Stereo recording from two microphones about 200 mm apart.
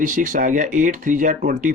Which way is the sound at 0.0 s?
40° right (ahead or behind).